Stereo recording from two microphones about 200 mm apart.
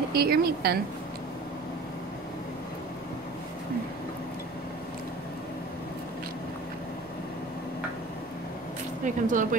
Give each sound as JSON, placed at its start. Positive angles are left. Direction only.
{"t": 0.1, "sound": "a woman's voice", "side_deg": -50}
{"t": 9.0, "sound": "speech", "side_deg": -40}